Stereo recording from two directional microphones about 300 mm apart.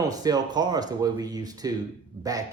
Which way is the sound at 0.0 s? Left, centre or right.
Centre.